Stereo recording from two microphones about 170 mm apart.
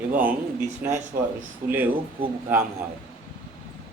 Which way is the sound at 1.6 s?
55° right (ahead or behind).